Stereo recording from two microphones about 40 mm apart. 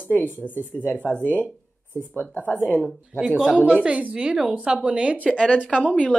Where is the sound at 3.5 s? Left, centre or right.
Right.